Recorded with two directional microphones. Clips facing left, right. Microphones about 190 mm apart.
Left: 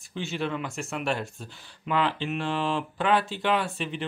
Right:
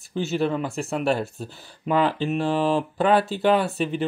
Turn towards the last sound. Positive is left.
turn(degrees=-40)  # may be behind; listen again after turning